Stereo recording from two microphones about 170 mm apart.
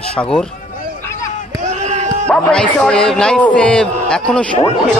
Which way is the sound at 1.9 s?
45° right (ahead or behind).